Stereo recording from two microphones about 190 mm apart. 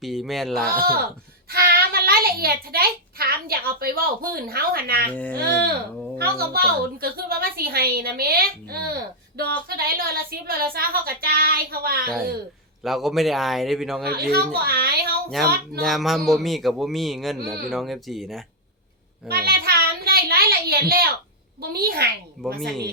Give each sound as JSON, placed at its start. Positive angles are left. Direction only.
{"t": 0.0, "sound": "speech", "side_deg": 0}
{"t": 0.7, "sound": "a woman's voice", "side_deg": -55}
{"t": 5.1, "sound": "speech", "side_deg": 10}
{"t": 6.1, "sound": "a woman's voice", "side_deg": -55}
{"t": 12.8, "sound": "speech", "side_deg": 0}
{"t": 14.1, "sound": "a child's voice", "side_deg": -55}
{"t": 15.4, "sound": "speech", "side_deg": 0}
{"t": 19.3, "sound": "a sound", "side_deg": -55}
{"t": 21.6, "sound": "a child's voice", "side_deg": -55}